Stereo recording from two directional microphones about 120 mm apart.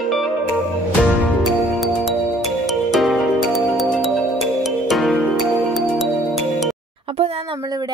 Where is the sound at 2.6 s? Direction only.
Centre (ahead or behind).